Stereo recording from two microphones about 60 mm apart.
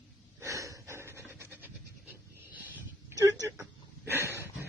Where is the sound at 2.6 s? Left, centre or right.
Right.